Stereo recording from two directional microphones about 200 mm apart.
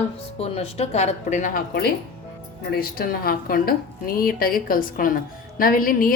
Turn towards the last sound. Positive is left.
turn(degrees=45)  # may be behind; listen again after turning